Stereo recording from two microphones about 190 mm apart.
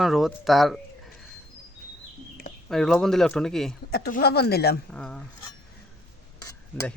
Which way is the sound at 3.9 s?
55° left (ahead or behind).